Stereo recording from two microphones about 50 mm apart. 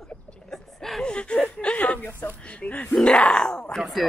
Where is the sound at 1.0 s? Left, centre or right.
Left.